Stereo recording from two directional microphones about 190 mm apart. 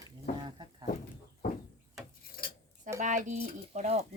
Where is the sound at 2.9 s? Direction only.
40° right (ahead or behind).